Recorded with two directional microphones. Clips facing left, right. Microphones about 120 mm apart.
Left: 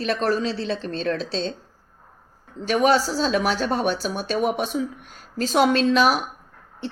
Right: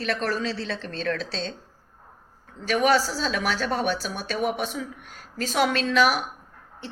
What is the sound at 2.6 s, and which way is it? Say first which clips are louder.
A woman's voice: left 2 dB; 25° left (ahead or behind).